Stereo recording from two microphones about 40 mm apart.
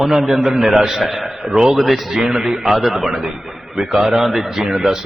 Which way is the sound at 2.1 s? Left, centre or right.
Centre.